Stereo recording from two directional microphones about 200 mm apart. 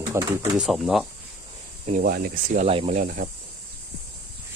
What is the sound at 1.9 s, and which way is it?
Speech, 50° right (ahead or behind).